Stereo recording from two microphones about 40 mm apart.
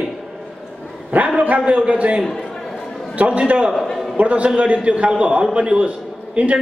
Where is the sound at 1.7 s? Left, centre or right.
Right.